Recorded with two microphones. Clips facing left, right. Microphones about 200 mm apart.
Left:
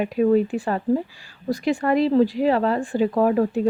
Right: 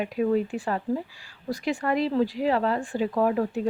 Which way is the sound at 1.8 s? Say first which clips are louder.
Left 6 dB; 45° left (ahead or behind).